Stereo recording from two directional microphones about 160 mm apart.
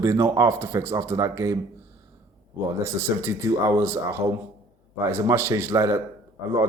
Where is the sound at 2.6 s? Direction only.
15° right (ahead or behind).